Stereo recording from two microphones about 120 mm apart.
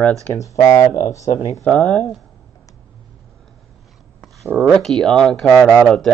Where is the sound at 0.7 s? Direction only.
25° left (ahead or behind).